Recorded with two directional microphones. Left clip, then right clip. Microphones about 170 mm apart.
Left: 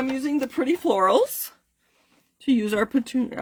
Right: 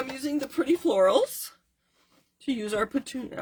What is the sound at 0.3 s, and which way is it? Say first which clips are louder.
Speech: left 1 dB; 40° left (ahead or behind).